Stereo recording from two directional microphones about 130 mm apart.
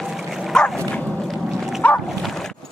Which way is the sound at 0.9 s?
5° left (ahead or behind).